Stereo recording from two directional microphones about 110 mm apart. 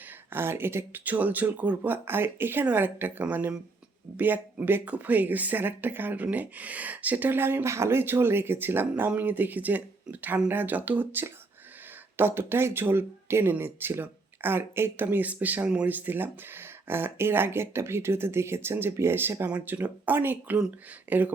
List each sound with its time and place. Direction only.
0.3 s speech: 20° right (ahead or behind)